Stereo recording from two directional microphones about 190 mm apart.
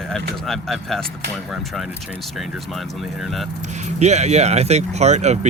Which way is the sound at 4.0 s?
35° right (ahead or behind).